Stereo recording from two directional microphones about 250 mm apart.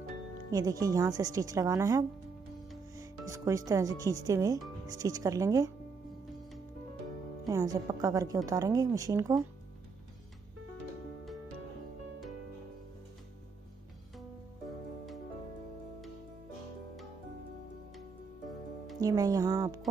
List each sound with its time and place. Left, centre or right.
0.5 s speech: centre
7.4 s speech: centre
18.9 s speech: centre